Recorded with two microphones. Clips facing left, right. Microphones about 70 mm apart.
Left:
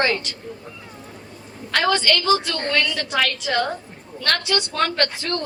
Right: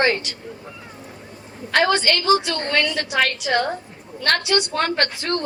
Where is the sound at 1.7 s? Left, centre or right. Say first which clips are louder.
Right 1 dB; right.